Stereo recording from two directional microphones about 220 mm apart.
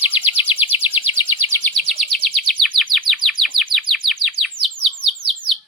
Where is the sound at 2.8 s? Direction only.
Centre (ahead or behind).